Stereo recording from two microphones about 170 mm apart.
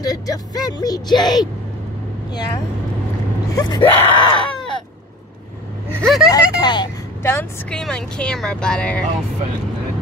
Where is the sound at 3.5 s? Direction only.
25° left (ahead or behind).